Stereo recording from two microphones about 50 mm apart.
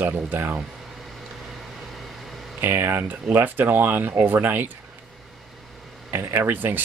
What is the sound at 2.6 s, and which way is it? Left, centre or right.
Speech, right.